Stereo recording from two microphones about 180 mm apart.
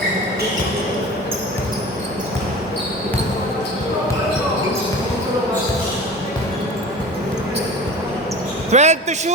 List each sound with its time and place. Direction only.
8.7 s speech: 40° right (ahead or behind)